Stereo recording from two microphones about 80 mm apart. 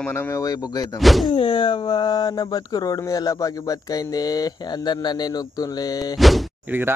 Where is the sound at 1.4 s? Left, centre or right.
Left.